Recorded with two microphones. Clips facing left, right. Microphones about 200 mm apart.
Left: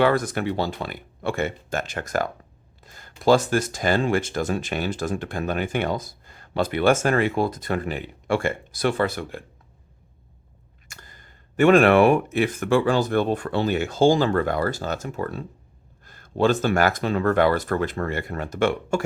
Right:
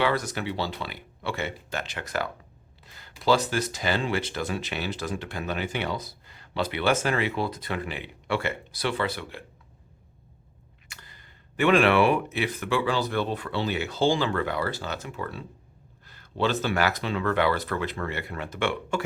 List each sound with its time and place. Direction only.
0.0 s speech: 50° left (ahead or behind)
2.8 s a sound: 45° left (ahead or behind)
3.2 s speech: 50° left (ahead or behind)
10.8 s speech: 45° left (ahead or behind)